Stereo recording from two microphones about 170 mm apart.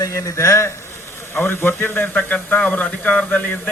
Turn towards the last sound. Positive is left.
turn(degrees=10)  # may be behind; listen again after turning